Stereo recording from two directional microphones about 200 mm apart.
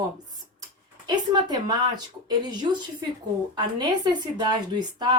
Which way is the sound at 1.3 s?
20° right (ahead or behind).